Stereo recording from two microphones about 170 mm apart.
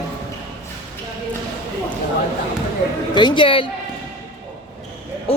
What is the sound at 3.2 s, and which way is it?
Speech, 30° left (ahead or behind).